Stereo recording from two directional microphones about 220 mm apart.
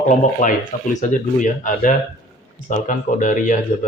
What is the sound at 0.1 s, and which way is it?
Speech, 35° left (ahead or behind).